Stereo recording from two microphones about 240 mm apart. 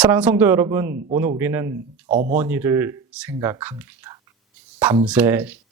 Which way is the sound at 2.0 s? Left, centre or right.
Right.